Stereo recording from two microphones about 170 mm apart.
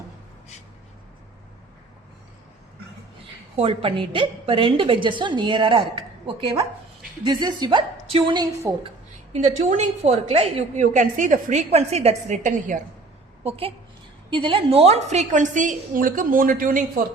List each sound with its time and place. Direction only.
3.6 s a woman's voice: 35° right (ahead or behind)
8.7 s a woman's voice: 15° right (ahead or behind)
9.3 s a woman's voice: 45° right (ahead or behind)
13.4 s a woman's voice: 35° right (ahead or behind); by 16.8 s 55° right (ahead or behind)